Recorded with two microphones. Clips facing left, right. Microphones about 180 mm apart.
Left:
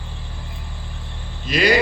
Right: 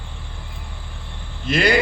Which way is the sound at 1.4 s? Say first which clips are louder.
Left 1 dB; 55° right (ahead or behind).